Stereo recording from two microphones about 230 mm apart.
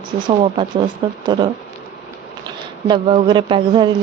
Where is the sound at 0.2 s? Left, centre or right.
Right.